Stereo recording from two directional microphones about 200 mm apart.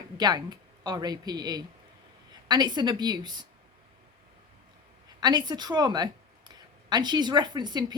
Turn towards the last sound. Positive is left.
turn(degrees=-20)  # may be behind; listen again after turning